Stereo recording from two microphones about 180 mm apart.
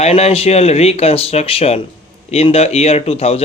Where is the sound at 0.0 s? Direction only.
35° left (ahead or behind).